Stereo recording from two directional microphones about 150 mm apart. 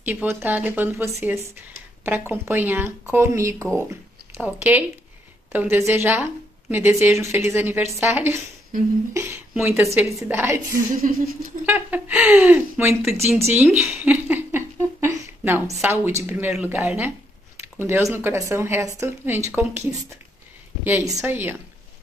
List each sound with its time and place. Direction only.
0.0 s a woman's voice: 10° right (ahead or behind)
11.0 s a sound: 60° right (ahead or behind)
11.6 s a woman's voice: 10° right (ahead or behind)